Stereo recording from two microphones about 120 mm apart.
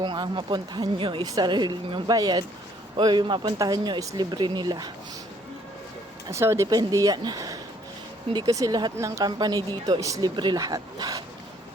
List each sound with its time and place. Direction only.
0.0 s speech: 40° right (ahead or behind)
6.3 s speech: 25° right (ahead or behind)